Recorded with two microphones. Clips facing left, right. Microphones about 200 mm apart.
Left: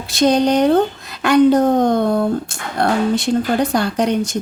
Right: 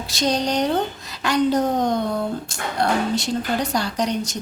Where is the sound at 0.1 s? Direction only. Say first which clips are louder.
Left 8 dB; 55° left (ahead or behind).